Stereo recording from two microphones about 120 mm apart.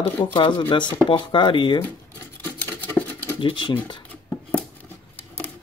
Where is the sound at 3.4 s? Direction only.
40° left (ahead or behind).